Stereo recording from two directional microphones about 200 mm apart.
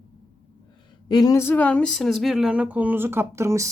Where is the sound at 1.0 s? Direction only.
20° left (ahead or behind).